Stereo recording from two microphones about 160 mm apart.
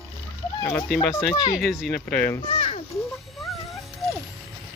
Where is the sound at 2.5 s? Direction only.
40° left (ahead or behind).